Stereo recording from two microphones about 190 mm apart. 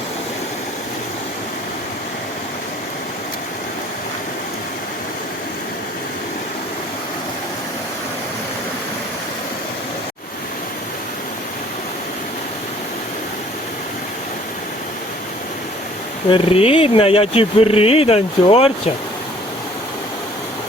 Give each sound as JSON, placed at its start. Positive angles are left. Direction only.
{"t": 16.3, "sound": "speech", "side_deg": 30}